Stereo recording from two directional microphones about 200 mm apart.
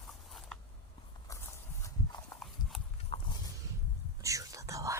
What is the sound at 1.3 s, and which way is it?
Horse, 15° left (ahead or behind).